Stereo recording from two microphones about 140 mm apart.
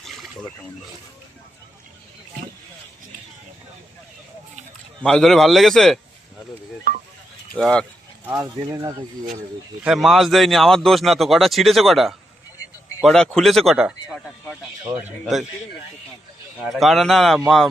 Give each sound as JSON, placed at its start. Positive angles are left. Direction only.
{"t": 0.0, "sound": "a sound", "side_deg": 0}
{"t": 5.0, "sound": "speech", "side_deg": 5}
{"t": 6.9, "sound": "a sound", "side_deg": -90}
{"t": 7.5, "sound": "speech", "side_deg": 5}
{"t": 8.6, "sound": "speech", "side_deg": -25}
{"t": 9.8, "sound": "speech", "side_deg": 0}
{"t": 14.9, "sound": "speech", "side_deg": -5}
{"t": 16.6, "sound": "speech", "side_deg": 0}